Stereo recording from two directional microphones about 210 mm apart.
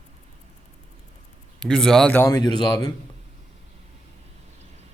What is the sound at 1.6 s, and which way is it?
Speech, centre (ahead or behind).